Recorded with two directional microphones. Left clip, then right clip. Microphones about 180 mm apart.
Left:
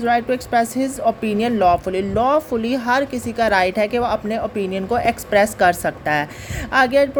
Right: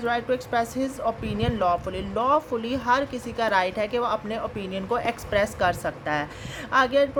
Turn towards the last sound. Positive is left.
turn(degrees=30)  # may be behind; listen again after turning